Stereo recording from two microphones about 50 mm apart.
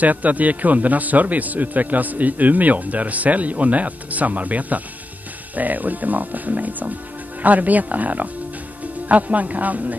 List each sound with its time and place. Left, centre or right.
0.0 s speech: right